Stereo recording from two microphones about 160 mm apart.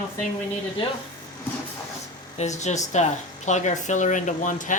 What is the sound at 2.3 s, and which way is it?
Speech, 45° left (ahead or behind).